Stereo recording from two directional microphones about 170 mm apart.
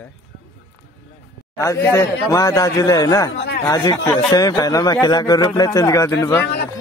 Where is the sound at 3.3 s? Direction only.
80° left.